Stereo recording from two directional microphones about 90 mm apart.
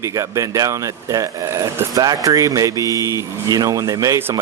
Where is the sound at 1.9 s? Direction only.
45° right (ahead or behind).